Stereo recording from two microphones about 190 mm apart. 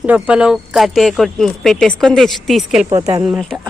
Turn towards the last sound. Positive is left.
turn(degrees=-5)  # may be behind; listen again after turning